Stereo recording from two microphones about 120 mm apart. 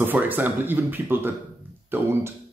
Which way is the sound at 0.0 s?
15° right (ahead or behind).